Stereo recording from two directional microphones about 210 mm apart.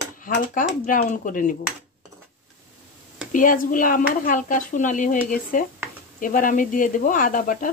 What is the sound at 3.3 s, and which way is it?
Speech, 40° left (ahead or behind).